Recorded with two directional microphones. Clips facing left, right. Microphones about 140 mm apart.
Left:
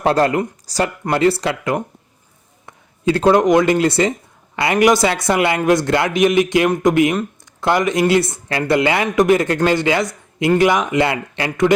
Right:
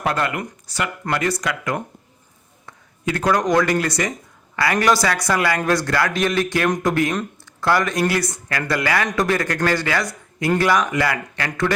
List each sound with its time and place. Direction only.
0.0 s speech: 35° left (ahead or behind)